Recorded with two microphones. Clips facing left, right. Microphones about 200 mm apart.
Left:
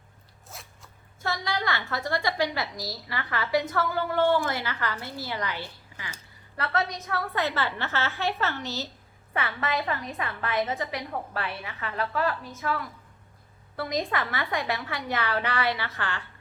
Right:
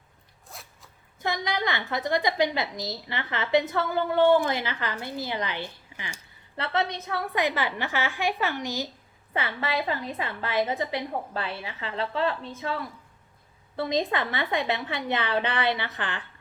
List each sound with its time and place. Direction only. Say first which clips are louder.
0.4 s zipper: even; centre (ahead or behind)
1.2 s a woman's voice: right 2 dB; 20° right (ahead or behind)
9.3 s a woman's voice: right 1 dB; 25° right (ahead or behind)